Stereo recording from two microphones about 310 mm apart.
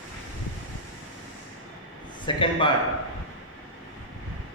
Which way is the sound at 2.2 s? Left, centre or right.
Centre.